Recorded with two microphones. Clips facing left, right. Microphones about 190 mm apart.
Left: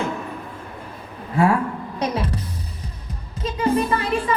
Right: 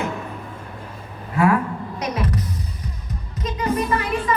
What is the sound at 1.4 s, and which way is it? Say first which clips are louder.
Speech: even; 30° left (ahead or behind).